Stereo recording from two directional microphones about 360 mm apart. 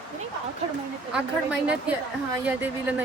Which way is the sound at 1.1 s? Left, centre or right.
Centre.